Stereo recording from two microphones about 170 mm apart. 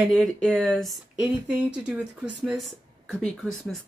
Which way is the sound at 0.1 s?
Centre (ahead or behind).